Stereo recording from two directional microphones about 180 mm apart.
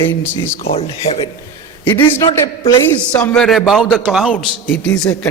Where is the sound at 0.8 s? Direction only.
35° left (ahead or behind).